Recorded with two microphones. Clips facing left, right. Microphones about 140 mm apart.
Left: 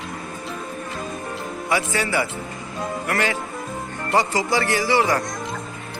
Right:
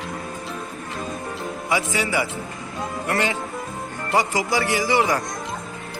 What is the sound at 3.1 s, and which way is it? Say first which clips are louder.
Speech: right 1 dB; 25° right (ahead or behind).